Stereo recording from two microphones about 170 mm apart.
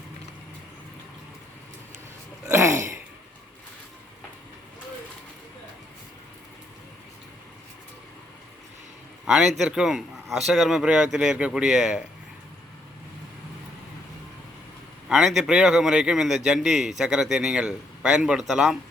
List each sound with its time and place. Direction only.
2.5 s throat clearing: 15° right (ahead or behind)
9.2 s speech: centre (ahead or behind)
15.1 s speech: 5° right (ahead or behind)